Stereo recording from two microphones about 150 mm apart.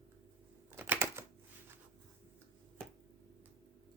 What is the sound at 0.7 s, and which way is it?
Typewriter, 15° right (ahead or behind).